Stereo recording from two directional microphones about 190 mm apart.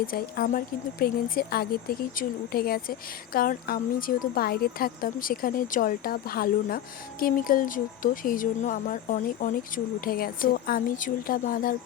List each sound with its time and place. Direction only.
0.1 s speech: 45° left (ahead or behind)